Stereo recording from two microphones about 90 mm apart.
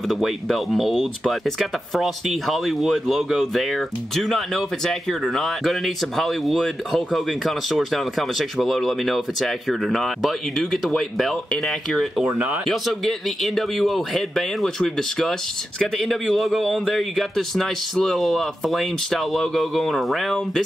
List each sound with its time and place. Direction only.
0.1 s speech: centre (ahead or behind)